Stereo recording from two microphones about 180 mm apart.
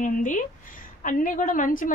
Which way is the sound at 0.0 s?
45° left (ahead or behind).